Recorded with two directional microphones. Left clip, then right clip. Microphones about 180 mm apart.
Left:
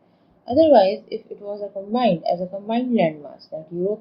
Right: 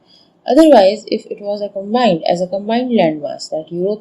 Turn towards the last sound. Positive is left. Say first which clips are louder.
# right 7 dB
turn(degrees=-40)  # may be behind; listen again after turning